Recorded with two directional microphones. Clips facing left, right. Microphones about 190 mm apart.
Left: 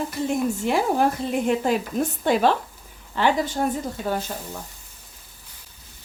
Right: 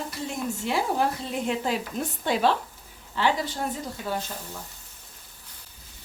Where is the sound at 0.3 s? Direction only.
50° left (ahead or behind).